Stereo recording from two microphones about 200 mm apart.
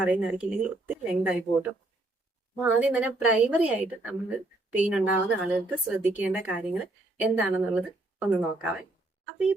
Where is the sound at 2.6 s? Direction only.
5° right (ahead or behind).